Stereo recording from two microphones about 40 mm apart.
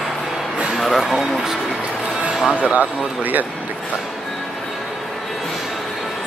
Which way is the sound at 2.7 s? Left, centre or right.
Right.